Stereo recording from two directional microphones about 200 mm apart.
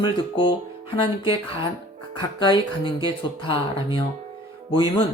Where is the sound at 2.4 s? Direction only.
25° left (ahead or behind).